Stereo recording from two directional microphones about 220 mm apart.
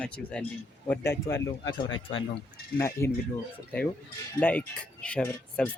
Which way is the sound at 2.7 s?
10° left (ahead or behind).